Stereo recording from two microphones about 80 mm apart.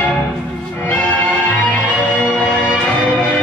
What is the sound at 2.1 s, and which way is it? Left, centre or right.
Music, centre.